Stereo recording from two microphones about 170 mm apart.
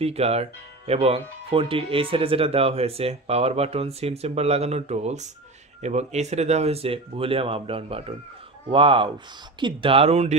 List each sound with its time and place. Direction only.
0.0 s speech: 40° right (ahead or behind)